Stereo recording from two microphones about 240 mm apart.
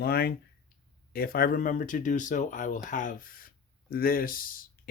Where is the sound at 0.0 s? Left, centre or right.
Left.